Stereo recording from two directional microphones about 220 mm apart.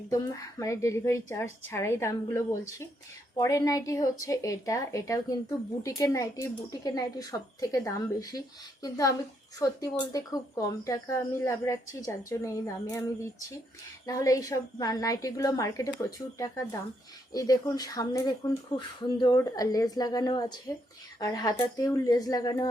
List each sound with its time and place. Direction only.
0.1 s a woman's voice: 15° left (ahead or behind)
8.8 s a woman's voice: 15° left (ahead or behind)
14.1 s a woman's voice: 15° left (ahead or behind)